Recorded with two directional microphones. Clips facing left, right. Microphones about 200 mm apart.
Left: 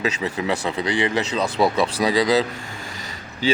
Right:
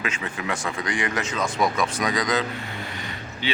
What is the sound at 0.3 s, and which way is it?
Speech, 35° left (ahead or behind).